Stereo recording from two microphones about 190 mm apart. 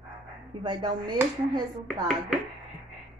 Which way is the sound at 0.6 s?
25° right (ahead or behind).